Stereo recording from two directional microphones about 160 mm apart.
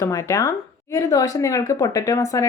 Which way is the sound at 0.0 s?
20° left (ahead or behind).